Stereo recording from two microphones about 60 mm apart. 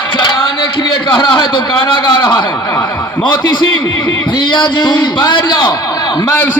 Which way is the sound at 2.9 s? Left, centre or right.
Left.